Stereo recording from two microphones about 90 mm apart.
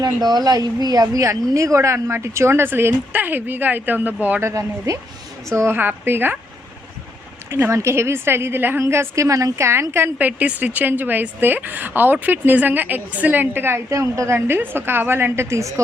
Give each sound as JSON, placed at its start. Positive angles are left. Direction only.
{"t": 0.0, "sound": "speech", "side_deg": -50}
{"t": 4.4, "sound": "a woman's voice", "side_deg": -35}
{"t": 7.7, "sound": "a woman's voice", "side_deg": -35}